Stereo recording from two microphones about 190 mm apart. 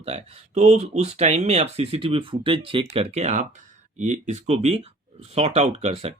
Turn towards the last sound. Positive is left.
turn(degrees=-35)  # may be behind; listen again after turning